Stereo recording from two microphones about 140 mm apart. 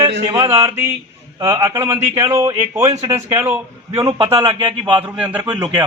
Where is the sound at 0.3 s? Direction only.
30° right (ahead or behind).